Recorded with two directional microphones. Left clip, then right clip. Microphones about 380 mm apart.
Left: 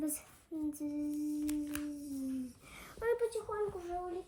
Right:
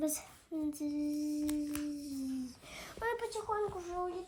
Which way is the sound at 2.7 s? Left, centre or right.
Centre.